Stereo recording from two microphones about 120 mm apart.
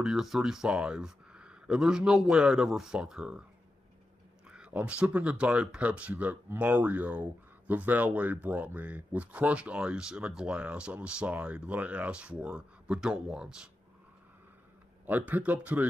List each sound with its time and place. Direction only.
0.0 s speech: 5° right (ahead or behind)
4.5 s speech: 10° right (ahead or behind)
15.0 s speech: 15° right (ahead or behind)